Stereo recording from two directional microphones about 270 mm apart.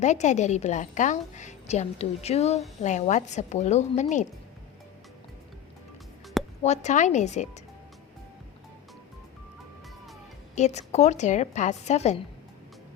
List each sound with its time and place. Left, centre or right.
0.0 s a woman's voice: left
6.6 s a woman's voice: left
10.5 s a woman's voice: left